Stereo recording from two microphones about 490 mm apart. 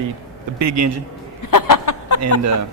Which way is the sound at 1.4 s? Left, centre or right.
Left.